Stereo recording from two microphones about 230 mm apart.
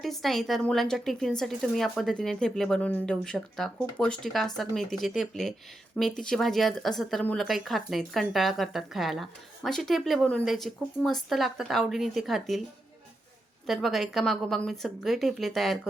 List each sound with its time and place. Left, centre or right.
0.0 s a woman's voice: centre
13.7 s a woman's voice: centre